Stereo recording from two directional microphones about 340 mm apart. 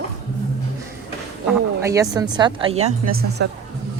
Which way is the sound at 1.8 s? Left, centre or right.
Centre.